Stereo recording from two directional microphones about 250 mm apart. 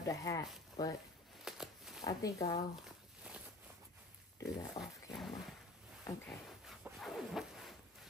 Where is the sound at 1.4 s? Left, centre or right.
Centre.